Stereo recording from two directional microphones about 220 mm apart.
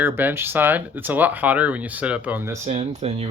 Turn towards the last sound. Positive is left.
turn(degrees=-25)  # may be behind; listen again after turning